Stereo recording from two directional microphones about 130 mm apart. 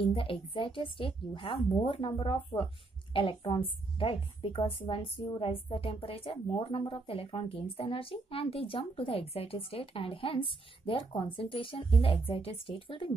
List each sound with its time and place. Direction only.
0.0 s a woman's voice: 40° left (ahead or behind)